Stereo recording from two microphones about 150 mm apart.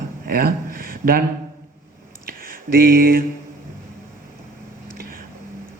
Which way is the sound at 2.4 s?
80° right.